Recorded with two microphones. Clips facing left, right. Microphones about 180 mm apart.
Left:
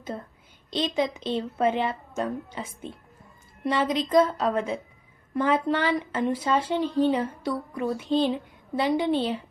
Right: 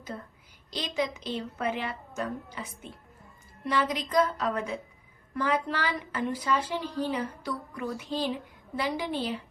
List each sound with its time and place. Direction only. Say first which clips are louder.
0.7 s speech: left 5 dB; 25° left (ahead or behind)